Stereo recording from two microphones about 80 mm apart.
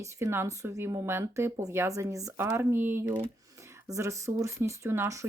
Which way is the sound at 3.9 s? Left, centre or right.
Right.